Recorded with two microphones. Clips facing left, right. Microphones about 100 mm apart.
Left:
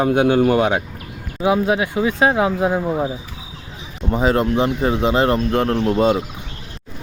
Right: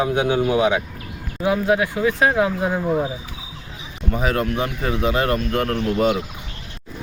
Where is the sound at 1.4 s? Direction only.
20° left (ahead or behind).